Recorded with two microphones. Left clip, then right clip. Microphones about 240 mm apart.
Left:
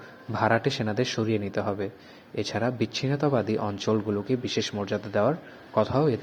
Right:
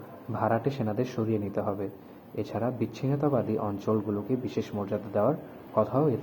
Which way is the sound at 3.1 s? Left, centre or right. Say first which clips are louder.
Left 1 dB; left.